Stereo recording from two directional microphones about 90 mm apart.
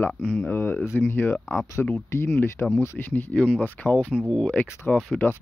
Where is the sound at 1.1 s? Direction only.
25° left (ahead or behind).